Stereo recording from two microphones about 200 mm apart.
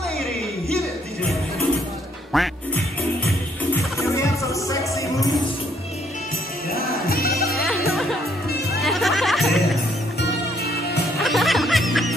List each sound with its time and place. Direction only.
2.3 s music: centre (ahead or behind)
4.1 s music: 15° left (ahead or behind)
6.7 s music: 50° left (ahead or behind)
7.5 s music: centre (ahead or behind)
11.1 s music: centre (ahead or behind)